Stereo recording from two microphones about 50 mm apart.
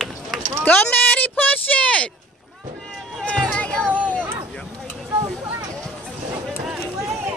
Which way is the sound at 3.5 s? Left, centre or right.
Left.